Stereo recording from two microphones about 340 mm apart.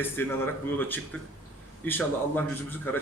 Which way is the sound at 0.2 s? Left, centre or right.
Centre.